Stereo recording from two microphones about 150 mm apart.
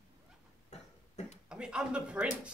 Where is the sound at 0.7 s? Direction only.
45° left (ahead or behind).